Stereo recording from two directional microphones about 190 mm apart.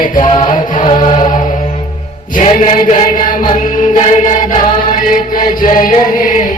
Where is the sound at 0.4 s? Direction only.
45° left (ahead or behind).